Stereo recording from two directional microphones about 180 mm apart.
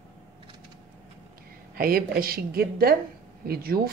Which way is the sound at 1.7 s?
55° right (ahead or behind).